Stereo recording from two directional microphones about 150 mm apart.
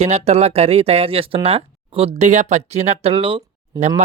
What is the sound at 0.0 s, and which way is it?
Speech, 45° right (ahead or behind).